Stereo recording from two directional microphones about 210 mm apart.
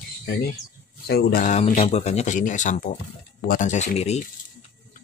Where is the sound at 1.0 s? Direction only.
45° left (ahead or behind).